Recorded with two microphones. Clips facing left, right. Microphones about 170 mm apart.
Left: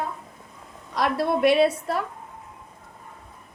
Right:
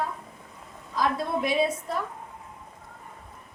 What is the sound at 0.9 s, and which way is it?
A woman's voice, 75° left (ahead or behind).